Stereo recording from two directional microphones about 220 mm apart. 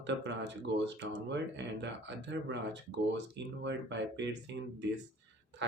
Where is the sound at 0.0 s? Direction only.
50° right (ahead or behind).